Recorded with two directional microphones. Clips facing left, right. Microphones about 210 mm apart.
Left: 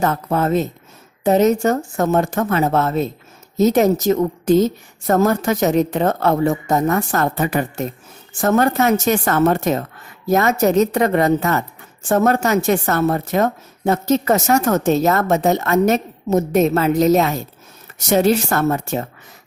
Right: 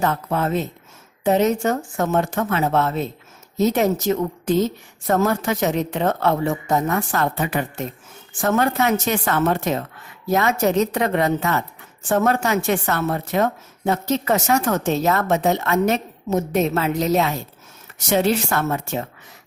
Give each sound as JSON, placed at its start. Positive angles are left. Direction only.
{"t": 0.0, "sound": "a woman's voice", "side_deg": 40}